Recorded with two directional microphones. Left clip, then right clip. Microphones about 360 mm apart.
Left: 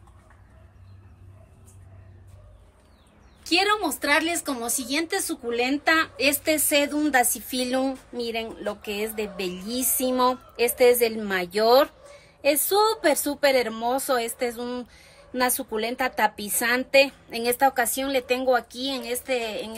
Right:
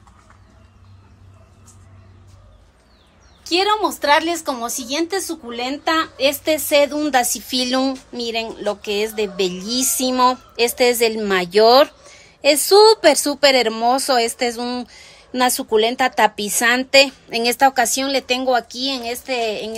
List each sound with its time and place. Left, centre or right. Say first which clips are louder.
3.4 s a woman's voice: right 5 dB; centre